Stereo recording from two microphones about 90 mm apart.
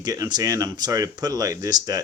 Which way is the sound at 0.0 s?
45° right (ahead or behind).